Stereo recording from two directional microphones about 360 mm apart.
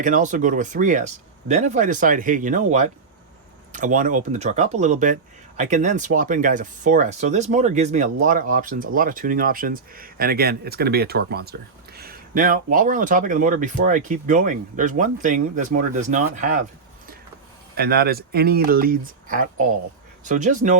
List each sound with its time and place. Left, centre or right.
0.0 s speech: right
3.7 s speech: right
17.7 s speech: right